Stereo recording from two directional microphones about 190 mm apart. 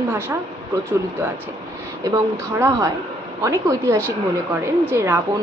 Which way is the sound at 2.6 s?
15° right (ahead or behind).